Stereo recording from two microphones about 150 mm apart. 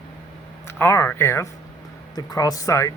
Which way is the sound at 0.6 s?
20° left (ahead or behind).